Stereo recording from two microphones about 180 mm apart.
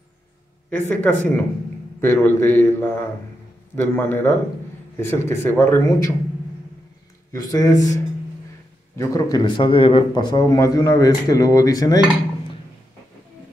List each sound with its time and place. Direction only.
0.7 s speech: 10° left (ahead or behind)
7.3 s a man's voice: 20° left (ahead or behind)